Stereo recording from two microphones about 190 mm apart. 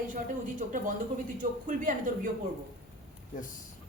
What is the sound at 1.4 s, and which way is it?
Speech, 45° right (ahead or behind).